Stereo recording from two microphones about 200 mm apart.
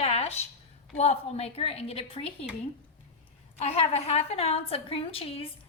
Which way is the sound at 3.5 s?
30° left (ahead or behind).